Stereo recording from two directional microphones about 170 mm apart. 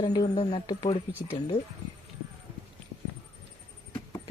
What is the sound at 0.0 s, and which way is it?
Speech, 25° left (ahead or behind).